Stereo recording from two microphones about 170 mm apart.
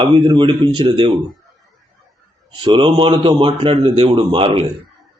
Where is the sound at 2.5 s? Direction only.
30° right (ahead or behind).